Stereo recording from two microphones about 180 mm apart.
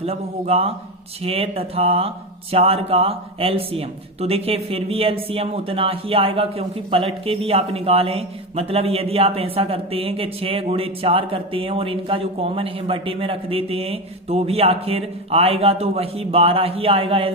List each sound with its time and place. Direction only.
0.0 s speech: 35° right (ahead or behind)